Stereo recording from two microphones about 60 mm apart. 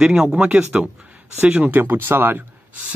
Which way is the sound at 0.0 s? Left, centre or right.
Centre.